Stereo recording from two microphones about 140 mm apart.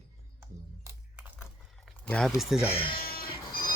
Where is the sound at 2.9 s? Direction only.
90° left.